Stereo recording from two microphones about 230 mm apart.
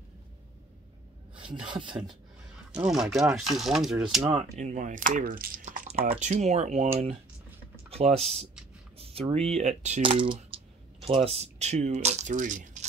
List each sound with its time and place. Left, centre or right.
1.3 s a sound: right
1.7 s speech: right
2.8 s speech: centre
4.3 s speech: right
7.9 s speech: right